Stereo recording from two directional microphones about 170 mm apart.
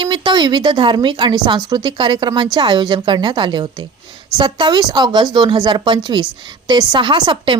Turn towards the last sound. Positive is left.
turn(degrees=-30)  # may be behind; listen again after turning